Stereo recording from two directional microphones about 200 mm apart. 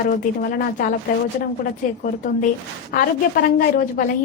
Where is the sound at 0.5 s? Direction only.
45° left (ahead or behind).